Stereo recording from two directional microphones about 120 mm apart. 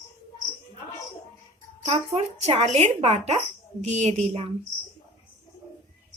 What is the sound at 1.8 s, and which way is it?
Speech, 60° right (ahead or behind).